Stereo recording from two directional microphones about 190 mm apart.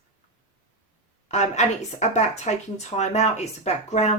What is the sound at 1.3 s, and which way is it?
Speech, 35° left (ahead or behind).